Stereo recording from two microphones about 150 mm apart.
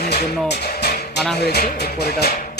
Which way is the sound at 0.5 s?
90° left.